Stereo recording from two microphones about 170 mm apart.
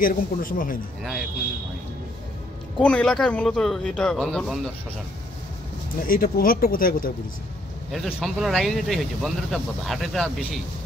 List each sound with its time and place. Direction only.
0.0 s speech: 55° left (ahead or behind)
2.8 s speech: 5° left (ahead or behind)
6.1 s speech: 60° left (ahead or behind)
7.9 s speech: centre (ahead or behind)